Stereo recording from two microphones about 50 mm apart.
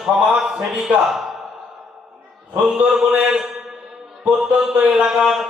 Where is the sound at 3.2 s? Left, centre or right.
Centre.